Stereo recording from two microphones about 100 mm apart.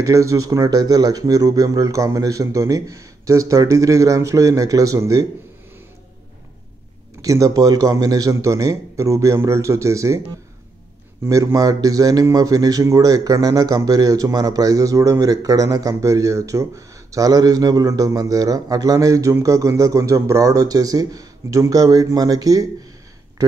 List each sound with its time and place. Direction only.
0.0 s speech: 30° right (ahead or behind)
7.2 s speech: 35° right (ahead or behind)
11.2 s speech: 35° right (ahead or behind)